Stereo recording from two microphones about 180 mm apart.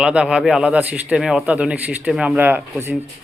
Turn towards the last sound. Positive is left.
turn(degrees=-10)  # may be behind; listen again after turning